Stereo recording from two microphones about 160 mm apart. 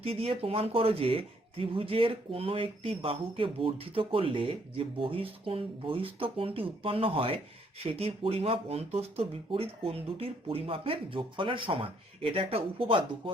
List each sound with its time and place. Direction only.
0.0 s speech: 35° right (ahead or behind)